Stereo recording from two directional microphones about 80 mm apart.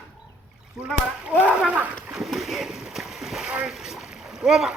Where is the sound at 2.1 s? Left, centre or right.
Centre.